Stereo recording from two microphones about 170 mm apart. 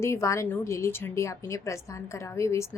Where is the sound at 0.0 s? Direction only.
15° left (ahead or behind).